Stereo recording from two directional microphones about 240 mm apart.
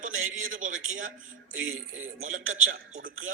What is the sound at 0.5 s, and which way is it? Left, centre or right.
A man's voice, right.